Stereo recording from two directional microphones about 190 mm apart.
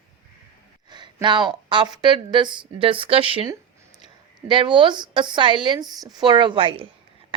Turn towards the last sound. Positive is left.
turn(degrees=-30)  # may be behind; listen again after turning